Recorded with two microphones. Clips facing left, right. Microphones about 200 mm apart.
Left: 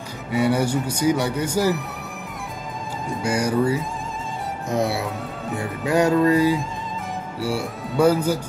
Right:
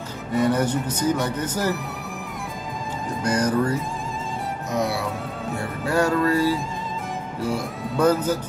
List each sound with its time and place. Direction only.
0.3 s speech: 10° left (ahead or behind)
3.2 s speech: 10° left (ahead or behind)
4.6 s speech: 30° left (ahead or behind)
5.5 s speech: 15° left (ahead or behind)